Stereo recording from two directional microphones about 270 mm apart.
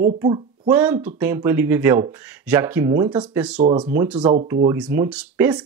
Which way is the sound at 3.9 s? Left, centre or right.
Centre.